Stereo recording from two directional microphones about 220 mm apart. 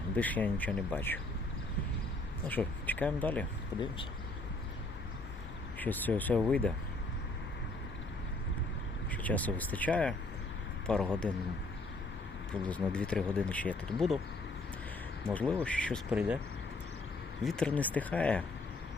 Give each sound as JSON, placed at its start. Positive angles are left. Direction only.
{"t": 0.2, "sound": "speech", "side_deg": 5}
{"t": 2.5, "sound": "speech", "side_deg": 10}
{"t": 5.8, "sound": "speech", "side_deg": 10}
{"t": 9.2, "sound": "speech", "side_deg": 5}
{"t": 12.5, "sound": "speech", "side_deg": 5}
{"t": 15.3, "sound": "speech", "side_deg": 5}
{"t": 17.4, "sound": "speech", "side_deg": 5}